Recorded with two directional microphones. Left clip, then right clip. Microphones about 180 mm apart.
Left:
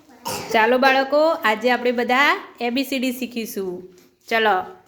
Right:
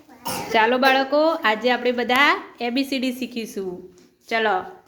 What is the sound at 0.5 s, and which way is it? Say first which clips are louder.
A woman's voice: left 1 dB; 15° left (ahead or behind).